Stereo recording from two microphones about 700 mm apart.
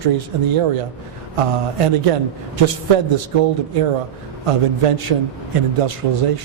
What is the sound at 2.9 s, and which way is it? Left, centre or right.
Speech, right.